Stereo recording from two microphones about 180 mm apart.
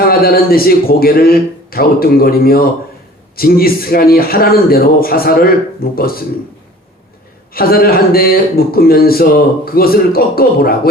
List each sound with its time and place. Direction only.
0.0 s speech: 55° left (ahead or behind)
7.5 s speech: 55° left (ahead or behind)